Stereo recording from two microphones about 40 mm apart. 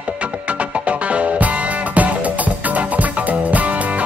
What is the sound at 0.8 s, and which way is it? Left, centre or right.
Music, right.